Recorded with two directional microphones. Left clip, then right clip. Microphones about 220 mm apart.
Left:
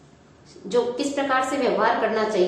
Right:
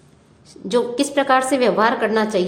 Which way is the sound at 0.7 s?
55° right (ahead or behind).